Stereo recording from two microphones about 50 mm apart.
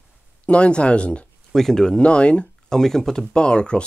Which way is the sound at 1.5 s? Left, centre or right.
Centre.